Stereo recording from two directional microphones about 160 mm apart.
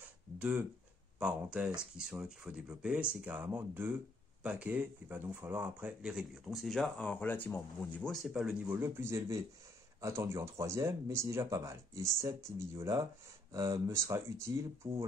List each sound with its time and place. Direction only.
0.4 s speech: 10° right (ahead or behind)